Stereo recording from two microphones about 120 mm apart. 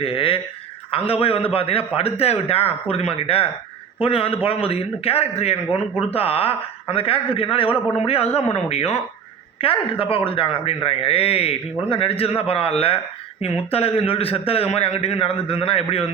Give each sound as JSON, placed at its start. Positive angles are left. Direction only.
{"t": 0.0, "sound": "a man's voice", "side_deg": 50}
{"t": 9.6, "sound": "a man's voice", "side_deg": 50}